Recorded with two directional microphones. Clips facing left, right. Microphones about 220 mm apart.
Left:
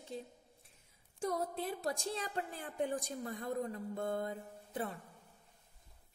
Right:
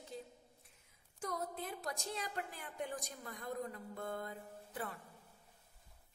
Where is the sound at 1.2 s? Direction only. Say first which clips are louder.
Left 5 dB; 30° left (ahead or behind).